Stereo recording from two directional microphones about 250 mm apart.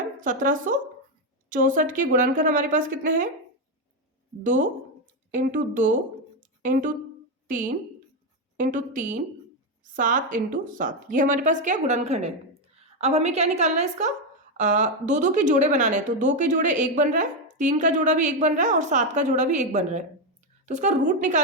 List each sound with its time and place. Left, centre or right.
0.2 s a woman's voice: right
4.4 s a woman's voice: right